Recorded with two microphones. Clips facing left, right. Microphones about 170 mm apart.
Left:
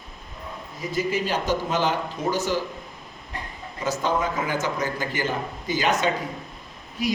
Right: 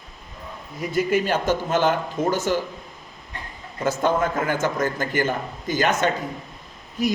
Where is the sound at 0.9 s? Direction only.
55° right (ahead or behind).